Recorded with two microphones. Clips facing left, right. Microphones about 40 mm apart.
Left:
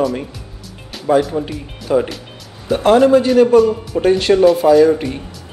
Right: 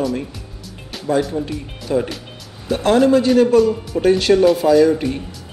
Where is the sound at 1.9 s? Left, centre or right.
Centre.